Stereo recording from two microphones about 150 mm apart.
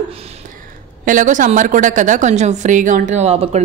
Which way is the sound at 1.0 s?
60° right (ahead or behind).